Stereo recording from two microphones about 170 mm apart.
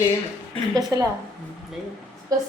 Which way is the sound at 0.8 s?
20° right (ahead or behind).